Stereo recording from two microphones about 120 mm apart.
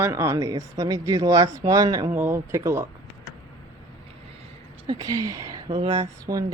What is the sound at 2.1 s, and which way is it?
Speech, 20° right (ahead or behind).